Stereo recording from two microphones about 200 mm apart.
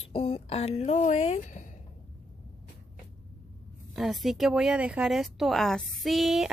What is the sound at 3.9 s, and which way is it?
Speech, centre (ahead or behind).